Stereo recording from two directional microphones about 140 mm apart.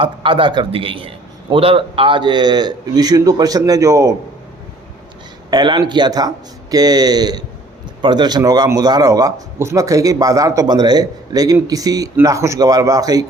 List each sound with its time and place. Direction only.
0.0 s a man's voice: 35° right (ahead or behind)
5.5 s speech: 30° right (ahead or behind)